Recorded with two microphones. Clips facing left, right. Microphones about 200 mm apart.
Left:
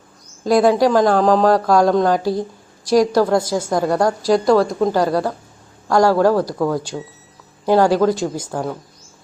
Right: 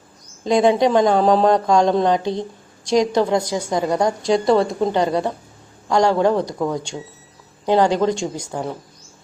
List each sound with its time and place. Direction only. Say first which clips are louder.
0.4 s a woman's voice: left 2 dB; centre (ahead or behind)
3.2 s a woman's voice: left 2 dB; 15° right (ahead or behind)
3.6 s a woman's voice: left 2 dB; 5° left (ahead or behind)